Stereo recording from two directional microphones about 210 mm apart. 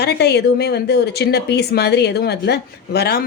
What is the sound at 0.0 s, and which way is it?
A woman's voice, 50° left (ahead or behind).